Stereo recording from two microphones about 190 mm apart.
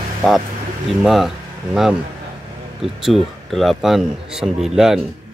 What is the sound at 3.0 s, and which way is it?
Speech, centre (ahead or behind).